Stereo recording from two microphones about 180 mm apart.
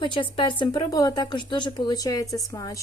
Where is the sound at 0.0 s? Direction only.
25° left (ahead or behind).